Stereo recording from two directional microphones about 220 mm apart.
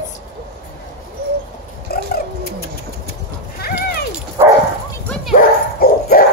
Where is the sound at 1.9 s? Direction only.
45° left (ahead or behind).